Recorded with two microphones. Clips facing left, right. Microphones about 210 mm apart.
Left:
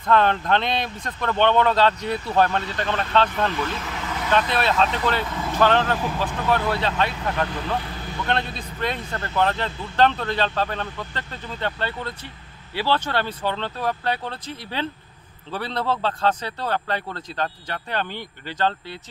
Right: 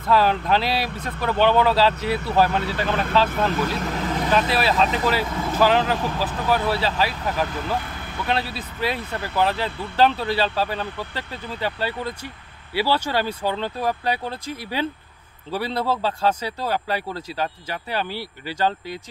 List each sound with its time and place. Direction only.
0.1 s speech: 5° right (ahead or behind)
3.8 s vehicle: 40° right (ahead or behind)
4.3 s speech: 5° right (ahead or behind)